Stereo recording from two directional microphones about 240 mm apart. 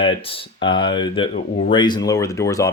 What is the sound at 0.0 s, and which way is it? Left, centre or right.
Speech, left.